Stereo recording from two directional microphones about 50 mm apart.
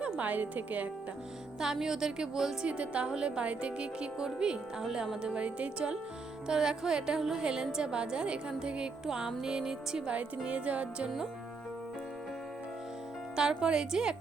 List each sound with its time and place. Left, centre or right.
0.2 s a woman's voice: right
1.5 s a woman's voice: centre
2.6 s a woman's voice: right
6.5 s a woman's voice: centre
10.1 s speech: right
13.3 s a woman's voice: centre